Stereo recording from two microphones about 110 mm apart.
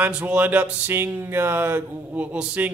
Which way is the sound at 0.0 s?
15° right (ahead or behind).